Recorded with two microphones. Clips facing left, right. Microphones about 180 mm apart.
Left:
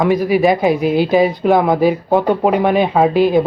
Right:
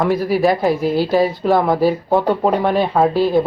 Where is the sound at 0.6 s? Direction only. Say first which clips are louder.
Left 2 dB; 15° left (ahead or behind).